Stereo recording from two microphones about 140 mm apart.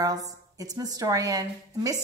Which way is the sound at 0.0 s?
25° right (ahead or behind).